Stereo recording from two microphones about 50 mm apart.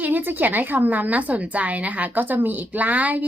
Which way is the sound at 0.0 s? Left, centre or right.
Right.